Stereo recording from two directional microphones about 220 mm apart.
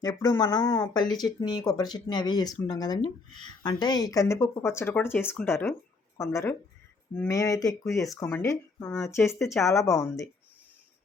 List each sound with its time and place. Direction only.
0.0 s speech: 15° left (ahead or behind)